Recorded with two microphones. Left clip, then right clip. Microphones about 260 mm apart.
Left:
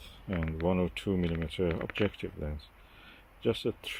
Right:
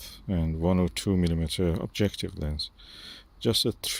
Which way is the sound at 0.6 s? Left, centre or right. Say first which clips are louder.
Right 3 dB; right.